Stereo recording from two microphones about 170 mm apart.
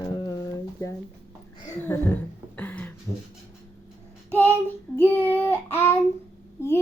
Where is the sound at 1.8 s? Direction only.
15° left (ahead or behind).